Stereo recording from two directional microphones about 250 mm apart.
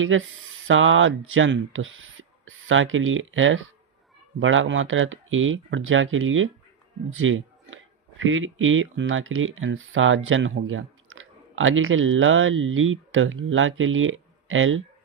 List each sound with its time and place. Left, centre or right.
0.0 s speech: right
7.1 s a sound: right
8.2 s speech: right